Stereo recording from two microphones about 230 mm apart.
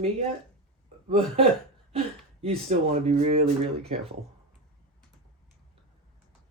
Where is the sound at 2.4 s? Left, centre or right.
Right.